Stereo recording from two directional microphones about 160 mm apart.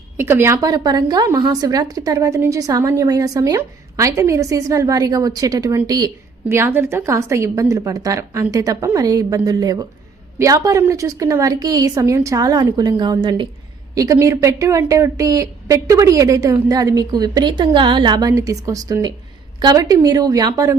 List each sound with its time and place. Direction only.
0.2 s a woman's voice: 15° right (ahead or behind)